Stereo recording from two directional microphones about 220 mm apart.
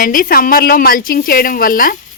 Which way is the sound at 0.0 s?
40° left (ahead or behind).